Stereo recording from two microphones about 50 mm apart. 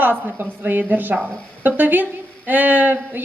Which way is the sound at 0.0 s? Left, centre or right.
Right.